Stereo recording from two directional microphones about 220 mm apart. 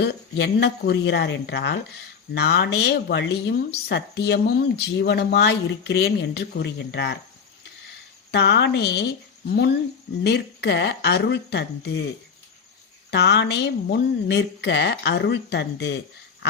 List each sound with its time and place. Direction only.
0.0 s speech: 50° left (ahead or behind)
8.3 s speech: 50° left (ahead or behind)
13.1 s speech: 50° left (ahead or behind)